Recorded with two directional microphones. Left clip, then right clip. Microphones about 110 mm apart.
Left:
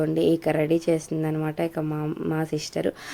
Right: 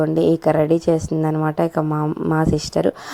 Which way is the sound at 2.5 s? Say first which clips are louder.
Right 8 dB; 35° right (ahead or behind).